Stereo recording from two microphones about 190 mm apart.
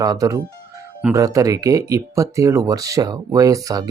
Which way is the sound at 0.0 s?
20° right (ahead or behind).